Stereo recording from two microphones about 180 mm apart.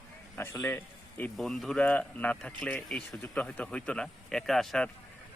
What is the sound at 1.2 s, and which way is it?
Speech, centre (ahead or behind).